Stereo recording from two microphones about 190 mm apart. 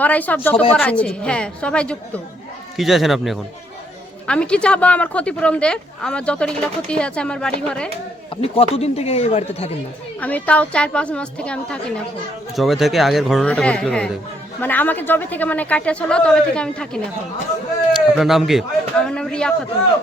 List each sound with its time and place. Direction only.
0.0 s speech: 10° left (ahead or behind)
8.4 s speech: 30° left (ahead or behind)
10.2 s speech: 10° left (ahead or behind)